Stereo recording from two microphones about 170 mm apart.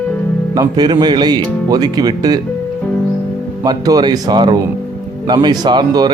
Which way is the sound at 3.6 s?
25° right (ahead or behind).